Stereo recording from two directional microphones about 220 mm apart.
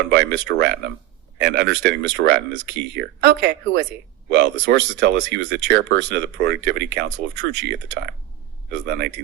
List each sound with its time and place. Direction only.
0.1 s speech: 55° right (ahead or behind)